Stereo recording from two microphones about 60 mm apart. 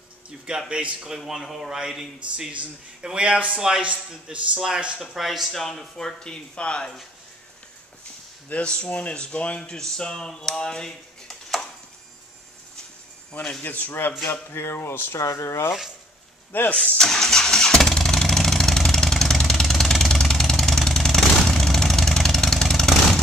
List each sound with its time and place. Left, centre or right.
0.5 s a man's voice: centre
3.8 s a man's voice: right
5.1 s speech: centre
8.5 s speech: centre
13.6 s speech: left
14.5 s speech: left
15.1 s speech: left
16.7 s vehicle: centre